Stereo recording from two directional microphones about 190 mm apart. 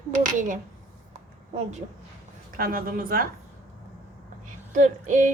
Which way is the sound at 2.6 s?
50° right (ahead or behind).